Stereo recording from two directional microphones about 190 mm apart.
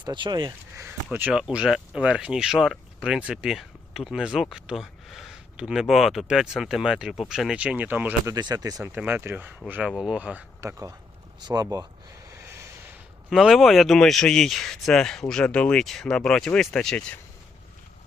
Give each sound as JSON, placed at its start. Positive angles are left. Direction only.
{"t": 0.0, "sound": "speech", "side_deg": -25}
{"t": 1.1, "sound": "speech", "side_deg": -5}
{"t": 8.4, "sound": "speech", "side_deg": -20}
{"t": 8.8, "sound": "speech", "side_deg": -5}
{"t": 13.3, "sound": "speech", "side_deg": 0}